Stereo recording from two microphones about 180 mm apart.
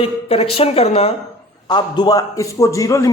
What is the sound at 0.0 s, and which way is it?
A woman's voice, 35° left (ahead or behind).